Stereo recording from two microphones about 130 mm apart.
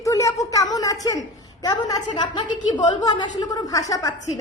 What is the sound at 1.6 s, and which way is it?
A woman's voice, 35° left (ahead or behind).